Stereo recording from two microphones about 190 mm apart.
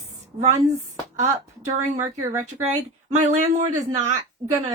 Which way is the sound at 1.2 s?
40° right (ahead or behind).